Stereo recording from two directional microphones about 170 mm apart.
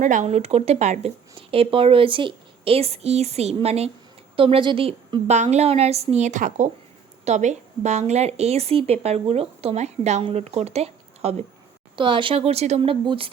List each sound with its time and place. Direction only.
0.0 s speech: 45° right (ahead or behind)